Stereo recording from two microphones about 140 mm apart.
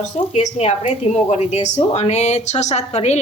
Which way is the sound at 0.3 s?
50° left (ahead or behind).